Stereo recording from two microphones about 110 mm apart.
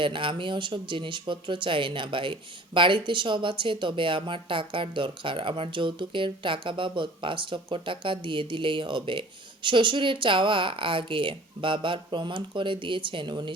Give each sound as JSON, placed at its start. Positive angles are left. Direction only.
{"t": 0.0, "sound": "speech", "side_deg": -50}